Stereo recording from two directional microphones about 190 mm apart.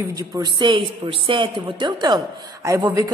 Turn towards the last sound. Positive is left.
turn(degrees=-20)  # may be behind; listen again after turning